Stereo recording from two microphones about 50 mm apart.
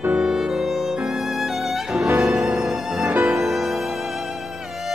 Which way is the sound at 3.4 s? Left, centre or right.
Centre.